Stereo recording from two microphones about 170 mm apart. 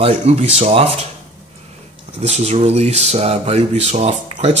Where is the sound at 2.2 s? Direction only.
40° right (ahead or behind).